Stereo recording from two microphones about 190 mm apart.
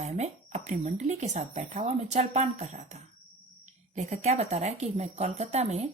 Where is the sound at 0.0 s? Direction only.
35° right (ahead or behind).